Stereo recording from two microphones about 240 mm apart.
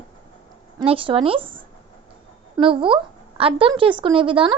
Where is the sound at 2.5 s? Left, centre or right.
Right.